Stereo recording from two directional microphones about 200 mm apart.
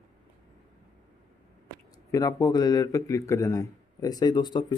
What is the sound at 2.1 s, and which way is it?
A man's voice, 15° left (ahead or behind).